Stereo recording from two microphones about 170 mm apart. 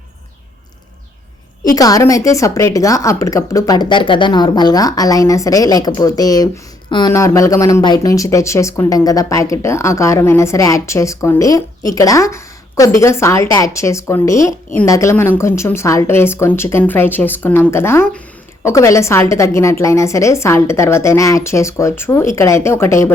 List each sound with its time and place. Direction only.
1.6 s a woman's voice: 20° left (ahead or behind)